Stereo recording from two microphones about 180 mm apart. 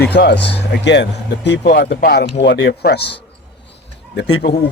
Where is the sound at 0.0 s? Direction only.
65° left (ahead or behind).